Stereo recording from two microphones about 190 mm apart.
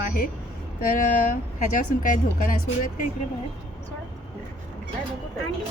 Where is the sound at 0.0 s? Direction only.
50° left (ahead or behind).